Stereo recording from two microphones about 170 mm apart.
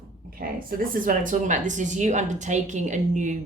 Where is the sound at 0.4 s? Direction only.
65° right (ahead or behind).